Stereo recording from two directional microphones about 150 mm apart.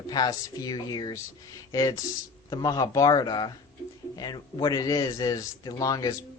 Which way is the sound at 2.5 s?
25° left (ahead or behind).